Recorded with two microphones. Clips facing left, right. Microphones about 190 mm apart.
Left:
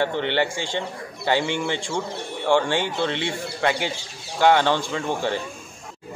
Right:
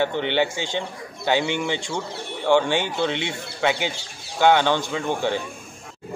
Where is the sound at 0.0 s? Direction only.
Centre (ahead or behind).